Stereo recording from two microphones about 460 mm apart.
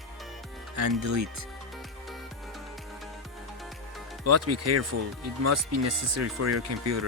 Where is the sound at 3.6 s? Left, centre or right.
Centre.